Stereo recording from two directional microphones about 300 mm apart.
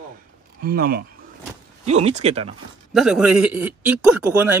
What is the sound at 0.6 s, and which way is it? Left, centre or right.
Speech, right.